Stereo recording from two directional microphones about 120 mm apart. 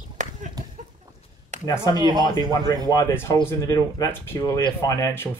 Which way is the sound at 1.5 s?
75° right (ahead or behind).